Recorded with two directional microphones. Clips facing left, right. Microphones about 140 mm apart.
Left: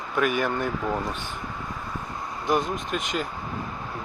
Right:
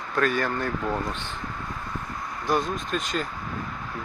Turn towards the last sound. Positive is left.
turn(degrees=15)  # may be behind; listen again after turning